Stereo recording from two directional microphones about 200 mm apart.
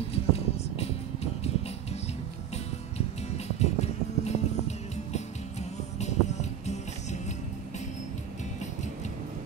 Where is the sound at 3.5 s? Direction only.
35° left (ahead or behind).